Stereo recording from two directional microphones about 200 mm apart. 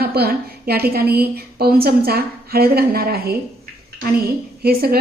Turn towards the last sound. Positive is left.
turn(degrees=-50)  # may be behind; listen again after turning